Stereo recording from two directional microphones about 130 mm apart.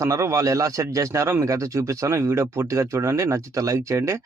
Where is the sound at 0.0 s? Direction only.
25° right (ahead or behind).